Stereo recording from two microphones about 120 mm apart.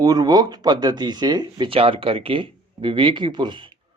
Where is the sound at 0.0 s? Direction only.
30° right (ahead or behind).